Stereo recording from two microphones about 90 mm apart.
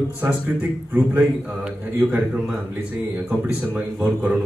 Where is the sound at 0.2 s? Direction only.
15° right (ahead or behind).